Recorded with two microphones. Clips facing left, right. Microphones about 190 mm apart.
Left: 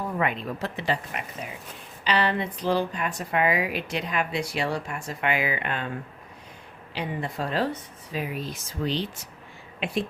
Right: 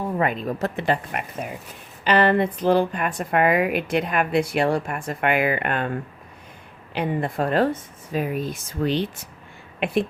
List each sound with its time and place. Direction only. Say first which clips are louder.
0.2 s speech: right 5 dB; 40° right (ahead or behind)
6.9 s speech: right 6 dB; 55° right (ahead or behind)